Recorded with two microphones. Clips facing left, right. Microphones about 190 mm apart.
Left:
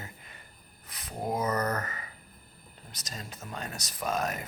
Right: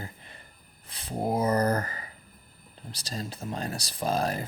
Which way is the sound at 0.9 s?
30° right (ahead or behind).